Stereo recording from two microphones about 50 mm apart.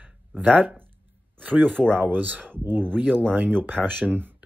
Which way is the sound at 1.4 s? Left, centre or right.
Right.